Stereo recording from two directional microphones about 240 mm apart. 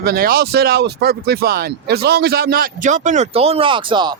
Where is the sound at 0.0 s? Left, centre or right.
Right.